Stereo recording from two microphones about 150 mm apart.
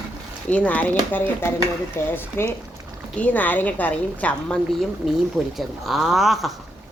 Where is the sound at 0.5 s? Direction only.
10° left (ahead or behind).